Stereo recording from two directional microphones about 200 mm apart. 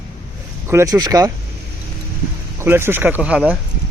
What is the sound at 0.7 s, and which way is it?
Speech, 15° right (ahead or behind).